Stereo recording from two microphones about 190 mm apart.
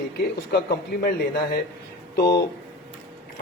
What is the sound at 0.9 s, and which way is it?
Speech, 55° left (ahead or behind).